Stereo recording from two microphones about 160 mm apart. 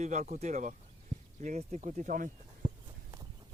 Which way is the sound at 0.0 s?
50° right (ahead or behind).